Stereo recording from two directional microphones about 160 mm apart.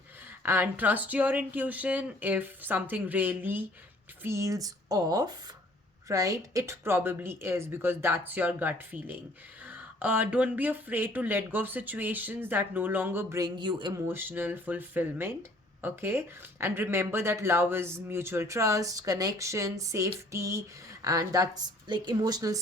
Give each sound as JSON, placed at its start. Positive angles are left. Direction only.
{"t": 0.3, "sound": "a woman's voice", "side_deg": -15}